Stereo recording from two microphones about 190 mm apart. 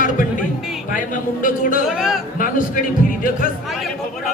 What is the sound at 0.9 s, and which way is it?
Speech, 45° left (ahead or behind).